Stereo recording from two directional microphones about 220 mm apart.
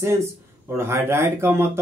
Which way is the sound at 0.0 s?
10° right (ahead or behind).